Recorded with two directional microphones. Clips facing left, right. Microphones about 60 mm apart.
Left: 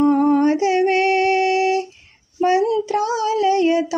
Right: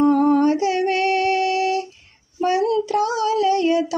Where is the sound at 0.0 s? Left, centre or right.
Left.